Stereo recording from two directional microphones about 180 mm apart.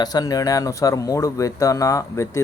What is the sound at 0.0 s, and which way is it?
Speech, 20° left (ahead or behind).